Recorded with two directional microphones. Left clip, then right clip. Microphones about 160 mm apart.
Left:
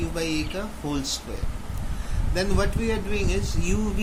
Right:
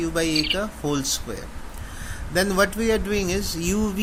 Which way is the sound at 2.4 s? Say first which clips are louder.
Right 6 dB; 55° right (ahead or behind).